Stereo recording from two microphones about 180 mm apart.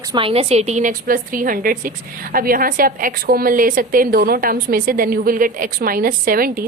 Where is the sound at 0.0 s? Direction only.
25° right (ahead or behind).